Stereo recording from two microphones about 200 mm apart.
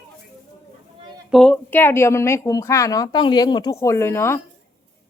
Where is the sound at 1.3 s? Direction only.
5° left (ahead or behind).